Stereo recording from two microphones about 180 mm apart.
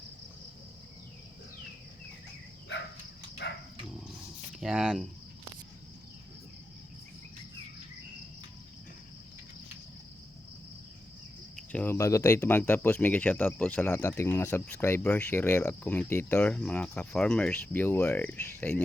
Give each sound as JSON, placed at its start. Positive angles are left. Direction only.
{"t": 3.4, "sound": "dog", "side_deg": 70}
{"t": 4.6, "sound": "speech", "side_deg": -5}
{"t": 11.5, "sound": "speech", "side_deg": 10}